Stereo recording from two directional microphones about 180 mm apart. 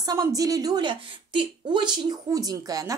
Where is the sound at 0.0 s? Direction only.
20° right (ahead or behind).